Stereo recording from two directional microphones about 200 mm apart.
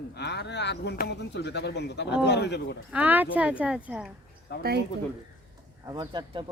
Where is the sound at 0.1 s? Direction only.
55° left (ahead or behind).